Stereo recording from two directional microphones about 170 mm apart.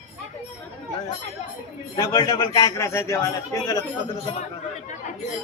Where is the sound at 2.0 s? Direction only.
25° left (ahead or behind).